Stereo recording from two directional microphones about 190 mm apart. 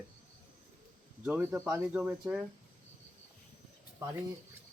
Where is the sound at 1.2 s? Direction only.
10° right (ahead or behind).